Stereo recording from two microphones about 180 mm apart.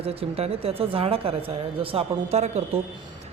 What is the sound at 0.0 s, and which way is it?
Speech, 35° right (ahead or behind).